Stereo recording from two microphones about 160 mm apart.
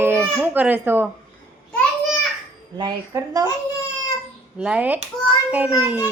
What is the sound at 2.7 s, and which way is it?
Speech, 25° right (ahead or behind).